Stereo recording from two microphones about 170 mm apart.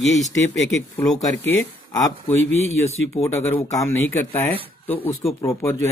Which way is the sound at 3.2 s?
15° left (ahead or behind).